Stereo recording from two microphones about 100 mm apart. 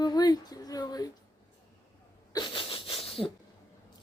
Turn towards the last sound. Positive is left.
turn(degrees=75)  # may be behind; listen again after turning